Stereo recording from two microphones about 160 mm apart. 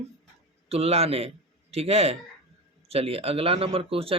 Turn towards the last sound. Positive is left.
turn(degrees=-35)  # may be behind; listen again after turning